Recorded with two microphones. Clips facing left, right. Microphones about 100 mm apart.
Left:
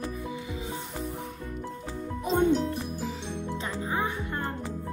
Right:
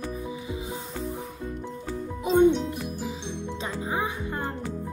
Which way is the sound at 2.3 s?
5° left (ahead or behind).